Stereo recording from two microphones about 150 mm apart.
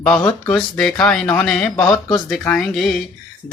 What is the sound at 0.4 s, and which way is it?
Speech, 5° left (ahead or behind).